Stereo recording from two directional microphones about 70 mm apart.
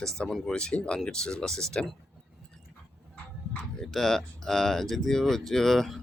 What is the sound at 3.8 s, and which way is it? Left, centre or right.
Speech, centre.